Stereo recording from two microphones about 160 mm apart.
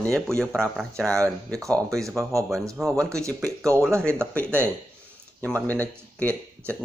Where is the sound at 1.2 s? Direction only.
20° right (ahead or behind).